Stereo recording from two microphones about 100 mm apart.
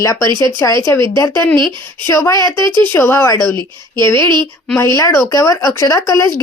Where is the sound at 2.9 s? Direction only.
25° left (ahead or behind).